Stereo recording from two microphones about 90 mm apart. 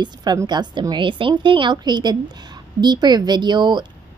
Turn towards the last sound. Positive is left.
turn(degrees=-55)  # may be behind; listen again after turning